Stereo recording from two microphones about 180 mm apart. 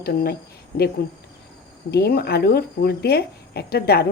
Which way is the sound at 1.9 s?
60° left (ahead or behind).